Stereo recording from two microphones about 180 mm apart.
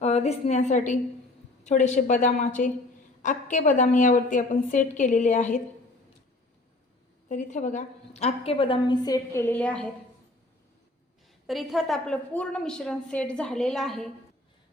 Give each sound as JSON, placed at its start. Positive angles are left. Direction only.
{"t": 0.0, "sound": "a woman's voice", "side_deg": 35}
{"t": 7.3, "sound": "a woman's voice", "side_deg": 45}
{"t": 11.4, "sound": "a woman's voice", "side_deg": 0}